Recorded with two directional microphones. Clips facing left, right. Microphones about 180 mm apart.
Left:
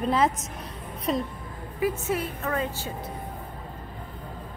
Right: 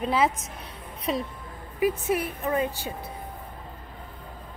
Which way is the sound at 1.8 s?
15° right (ahead or behind).